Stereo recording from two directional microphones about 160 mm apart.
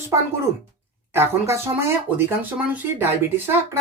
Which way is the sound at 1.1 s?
15° right (ahead or behind).